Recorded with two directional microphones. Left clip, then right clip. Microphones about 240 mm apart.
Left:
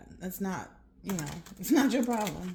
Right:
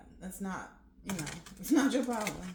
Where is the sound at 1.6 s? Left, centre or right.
Left.